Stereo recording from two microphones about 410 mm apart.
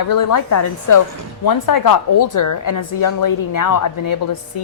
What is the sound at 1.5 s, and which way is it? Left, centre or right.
A woman's voice, left.